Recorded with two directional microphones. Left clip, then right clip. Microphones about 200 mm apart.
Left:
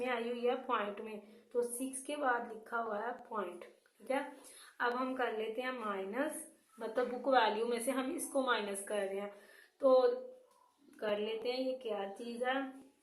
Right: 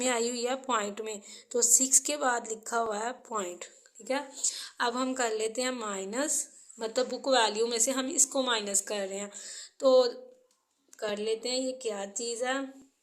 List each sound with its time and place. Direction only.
0.0 s a woman's voice: 55° right (ahead or behind)